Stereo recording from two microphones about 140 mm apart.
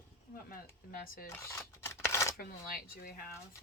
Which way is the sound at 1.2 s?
20° left (ahead or behind).